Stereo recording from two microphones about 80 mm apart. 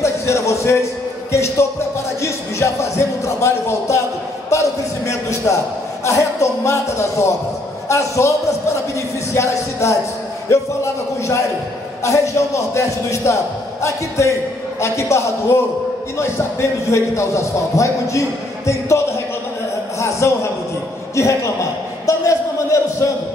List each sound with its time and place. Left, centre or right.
0.0 s a man's voice: left
9.3 s a man's voice: left
12.0 s a man's voice: left
16.9 s a man's voice: left
20.0 s a sound: left
21.1 s a man's voice: left
22.0 s a sound: left